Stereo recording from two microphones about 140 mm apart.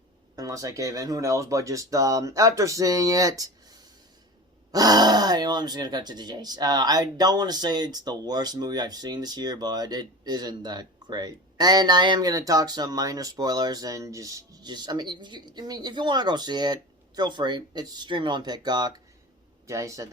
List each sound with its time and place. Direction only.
0.3 s speech: 25° right (ahead or behind)
4.7 s speech: 25° right (ahead or behind)